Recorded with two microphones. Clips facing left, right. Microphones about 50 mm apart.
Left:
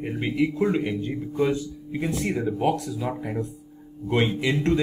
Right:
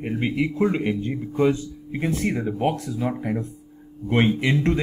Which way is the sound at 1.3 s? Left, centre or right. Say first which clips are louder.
Right 3 dB; right.